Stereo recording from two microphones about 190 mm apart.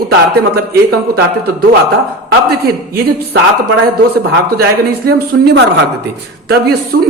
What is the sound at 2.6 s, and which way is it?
Speech, 55° right (ahead or behind).